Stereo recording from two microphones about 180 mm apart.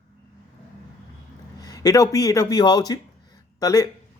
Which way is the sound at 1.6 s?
20° left (ahead or behind).